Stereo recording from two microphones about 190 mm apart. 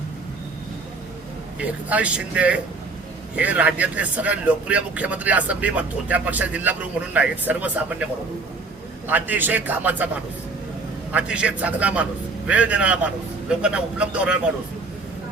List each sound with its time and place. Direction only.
1.5 s speech: 5° right (ahead or behind)
9.0 s speech: 10° right (ahead or behind)
11.1 s a man's voice: 5° right (ahead or behind)